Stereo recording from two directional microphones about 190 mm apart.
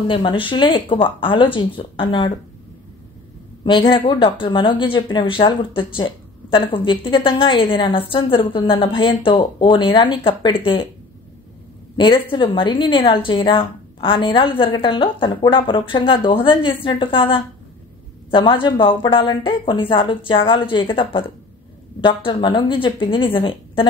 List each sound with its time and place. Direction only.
0.1 s speech: 25° left (ahead or behind)
3.6 s speech: 25° left (ahead or behind)
12.0 s speech: 25° left (ahead or behind)